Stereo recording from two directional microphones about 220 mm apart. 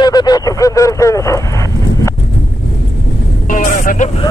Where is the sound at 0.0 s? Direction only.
20° left (ahead or behind).